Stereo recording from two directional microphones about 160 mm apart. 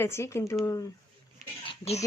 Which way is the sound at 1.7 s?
40° left (ahead or behind).